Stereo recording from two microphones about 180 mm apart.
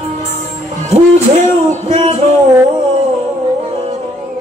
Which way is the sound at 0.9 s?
40° right (ahead or behind).